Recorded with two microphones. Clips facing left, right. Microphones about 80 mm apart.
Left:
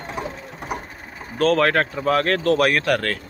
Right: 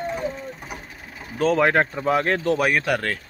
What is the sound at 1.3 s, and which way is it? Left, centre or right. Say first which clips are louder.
Speech: left 1 dB; centre.